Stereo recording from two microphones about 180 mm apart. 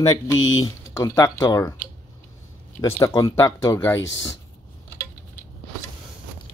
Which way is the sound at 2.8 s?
15° left (ahead or behind).